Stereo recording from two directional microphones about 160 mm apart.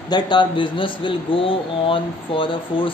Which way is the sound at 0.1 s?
30° left (ahead or behind).